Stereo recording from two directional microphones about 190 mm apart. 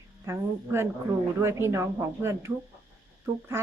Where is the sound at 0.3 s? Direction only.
15° right (ahead or behind).